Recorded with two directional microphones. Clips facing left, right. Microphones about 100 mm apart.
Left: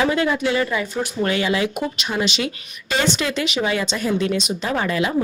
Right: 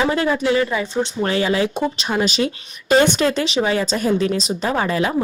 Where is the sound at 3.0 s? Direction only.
55° right (ahead or behind).